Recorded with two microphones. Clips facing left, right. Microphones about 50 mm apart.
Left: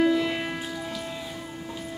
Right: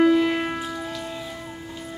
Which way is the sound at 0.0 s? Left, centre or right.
Centre.